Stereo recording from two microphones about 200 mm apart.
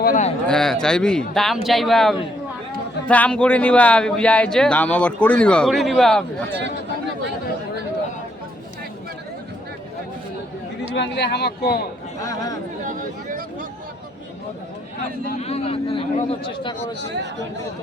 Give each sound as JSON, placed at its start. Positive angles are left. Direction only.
{"t": 0.0, "sound": "a sound", "side_deg": 40}
{"t": 0.4, "sound": "speech", "side_deg": 5}
{"t": 10.9, "sound": "speech", "side_deg": 60}
{"t": 12.2, "sound": "speech", "side_deg": 15}
{"t": 12.8, "sound": "a sound", "side_deg": -40}
{"t": 15.4, "sound": "speech", "side_deg": 30}